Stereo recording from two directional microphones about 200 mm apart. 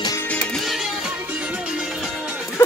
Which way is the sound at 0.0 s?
15° left (ahead or behind).